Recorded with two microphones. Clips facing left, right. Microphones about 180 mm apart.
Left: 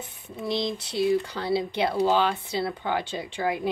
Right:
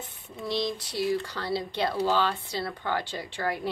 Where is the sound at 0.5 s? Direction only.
20° left (ahead or behind).